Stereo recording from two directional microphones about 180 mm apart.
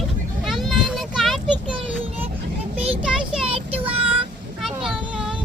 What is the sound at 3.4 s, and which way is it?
Child singing, 30° right (ahead or behind).